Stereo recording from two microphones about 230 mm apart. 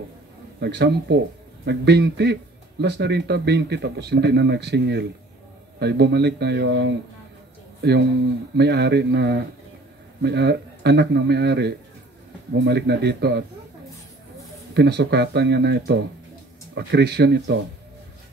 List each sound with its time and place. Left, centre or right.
0.6 s speech: right
8.5 s speech: right
14.7 s speech: right